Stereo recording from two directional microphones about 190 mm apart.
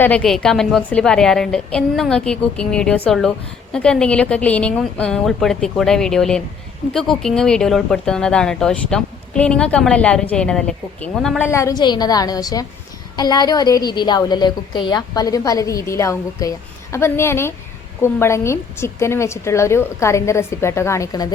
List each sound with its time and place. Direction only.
0.0 s a woman's voice: 5° left (ahead or behind)
11.4 s a woman's voice: 15° left (ahead or behind)